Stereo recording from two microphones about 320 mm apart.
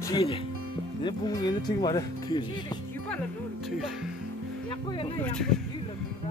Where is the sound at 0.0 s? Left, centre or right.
Centre.